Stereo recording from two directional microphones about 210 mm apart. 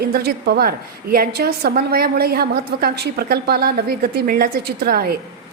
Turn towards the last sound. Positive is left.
turn(degrees=-45)  # may be behind; listen again after turning